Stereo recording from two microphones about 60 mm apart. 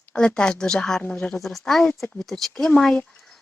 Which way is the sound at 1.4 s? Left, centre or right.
Centre.